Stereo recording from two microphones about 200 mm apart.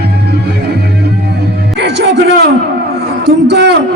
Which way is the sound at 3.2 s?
55° right (ahead or behind).